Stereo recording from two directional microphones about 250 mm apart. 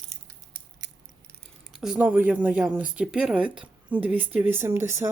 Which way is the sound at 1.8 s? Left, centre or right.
Centre.